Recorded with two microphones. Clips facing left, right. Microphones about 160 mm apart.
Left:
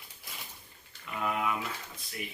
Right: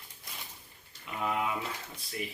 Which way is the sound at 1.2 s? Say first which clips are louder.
Even; 25° right (ahead or behind).